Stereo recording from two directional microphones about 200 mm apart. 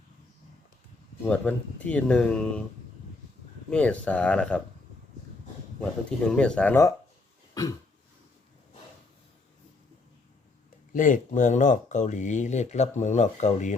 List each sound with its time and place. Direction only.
1.3 s speech: 5° left (ahead or behind)
3.7 s speech: 5° left (ahead or behind)
5.8 s speech: 5° left (ahead or behind)
10.9 s speech: 40° left (ahead or behind)